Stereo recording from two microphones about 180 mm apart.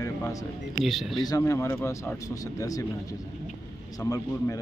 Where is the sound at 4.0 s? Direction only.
20° left (ahead or behind).